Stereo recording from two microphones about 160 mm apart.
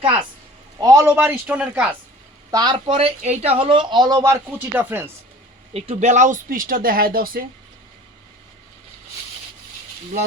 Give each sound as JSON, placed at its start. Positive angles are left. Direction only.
{"t": 0.8, "sound": "speech", "side_deg": -20}
{"t": 2.5, "sound": "speech", "side_deg": -25}
{"t": 4.6, "sound": "speech", "side_deg": -10}
{"t": 5.7, "sound": "speech", "side_deg": -40}